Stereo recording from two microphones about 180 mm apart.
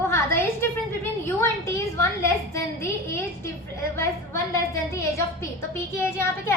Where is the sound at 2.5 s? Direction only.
15° left (ahead or behind).